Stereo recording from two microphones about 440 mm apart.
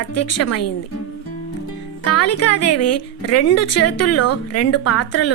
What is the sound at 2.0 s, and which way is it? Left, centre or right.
Speech, left.